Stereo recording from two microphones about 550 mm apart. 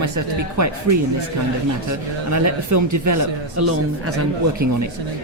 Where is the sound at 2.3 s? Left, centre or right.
Right.